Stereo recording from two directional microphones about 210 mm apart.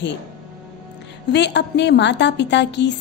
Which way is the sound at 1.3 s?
55° left (ahead or behind).